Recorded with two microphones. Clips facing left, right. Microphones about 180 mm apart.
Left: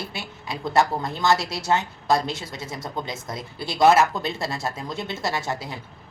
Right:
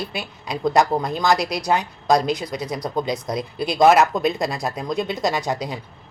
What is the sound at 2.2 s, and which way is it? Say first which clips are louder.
Speech: right 7 dB; 25° left (ahead or behind).